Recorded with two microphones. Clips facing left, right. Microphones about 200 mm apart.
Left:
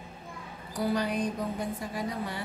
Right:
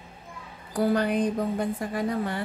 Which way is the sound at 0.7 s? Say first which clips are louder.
Right 5 dB; 55° right (ahead or behind).